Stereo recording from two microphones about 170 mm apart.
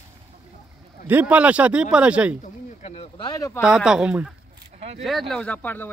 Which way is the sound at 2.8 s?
35° left (ahead or behind).